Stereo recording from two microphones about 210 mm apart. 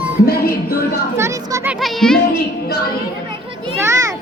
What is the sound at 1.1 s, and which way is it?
Speech, 15° right (ahead or behind).